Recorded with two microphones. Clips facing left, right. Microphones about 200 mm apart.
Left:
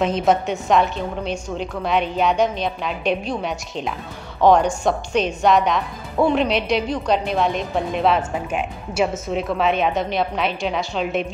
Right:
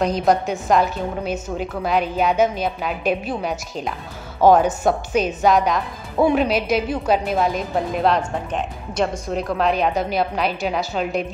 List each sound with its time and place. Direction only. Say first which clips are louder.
0.0 s a woman's voice: even; centre (ahead or behind)